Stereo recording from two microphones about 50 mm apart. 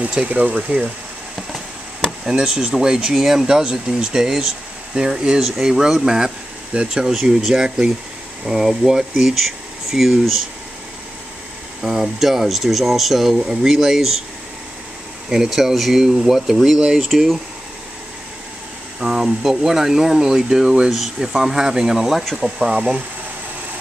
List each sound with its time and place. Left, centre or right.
0.2 s speech: right
2.2 s speech: centre
11.8 s speech: centre
15.2 s speech: centre
18.9 s speech: centre
20.9 s speech: centre
22.2 s speech: centre
22.6 s speech: centre